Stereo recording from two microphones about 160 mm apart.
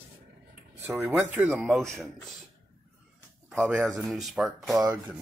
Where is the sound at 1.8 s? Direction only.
5° left (ahead or behind).